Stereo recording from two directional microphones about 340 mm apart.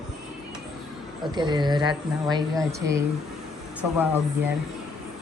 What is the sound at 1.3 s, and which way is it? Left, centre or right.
A woman's voice, centre.